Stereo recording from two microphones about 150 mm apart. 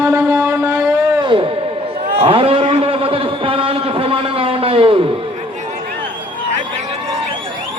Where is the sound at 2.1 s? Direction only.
40° right (ahead or behind).